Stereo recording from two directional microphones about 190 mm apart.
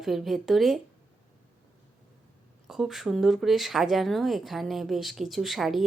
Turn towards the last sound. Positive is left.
turn(degrees=0)  # may be behind; listen again after turning